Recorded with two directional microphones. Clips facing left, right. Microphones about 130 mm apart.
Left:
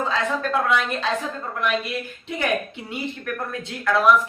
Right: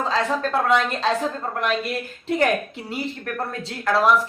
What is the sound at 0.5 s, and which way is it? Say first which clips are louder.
A man's voice: right 2 dB; 35° right (ahead or behind).